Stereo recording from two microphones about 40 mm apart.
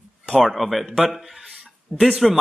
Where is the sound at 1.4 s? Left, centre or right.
Centre.